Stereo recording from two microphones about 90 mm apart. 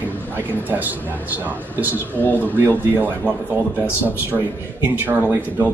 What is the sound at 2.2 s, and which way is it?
Speech, 20° left (ahead or behind).